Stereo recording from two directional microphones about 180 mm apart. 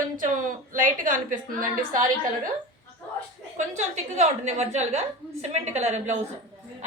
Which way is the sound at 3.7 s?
40° right (ahead or behind).